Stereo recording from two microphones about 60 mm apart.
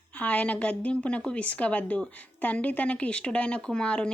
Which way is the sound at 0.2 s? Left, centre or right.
Left.